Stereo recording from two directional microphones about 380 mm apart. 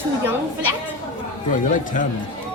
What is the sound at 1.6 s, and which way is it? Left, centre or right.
Speech, left.